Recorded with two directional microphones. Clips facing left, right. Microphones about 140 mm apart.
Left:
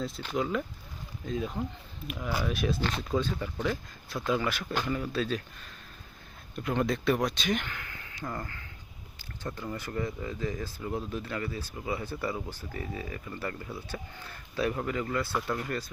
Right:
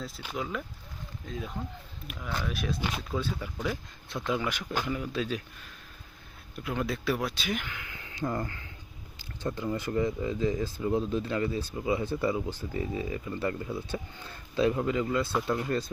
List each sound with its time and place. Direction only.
0.0 s speech: 5° right (ahead or behind)
6.6 s speech: 5° right (ahead or behind)
7.8 s speech: 20° right (ahead or behind)
9.4 s speech: 15° right (ahead or behind)